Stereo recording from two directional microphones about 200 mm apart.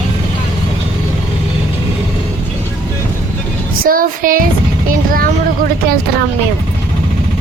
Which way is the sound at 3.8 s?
45° right (ahead or behind).